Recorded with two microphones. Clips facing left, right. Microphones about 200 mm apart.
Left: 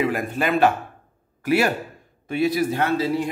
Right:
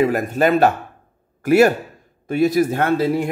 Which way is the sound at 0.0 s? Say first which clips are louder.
Right 6 dB; 40° right (ahead or behind).